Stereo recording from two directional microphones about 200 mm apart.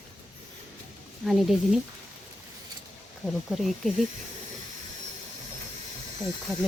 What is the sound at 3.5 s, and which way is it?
Speech, centre (ahead or behind).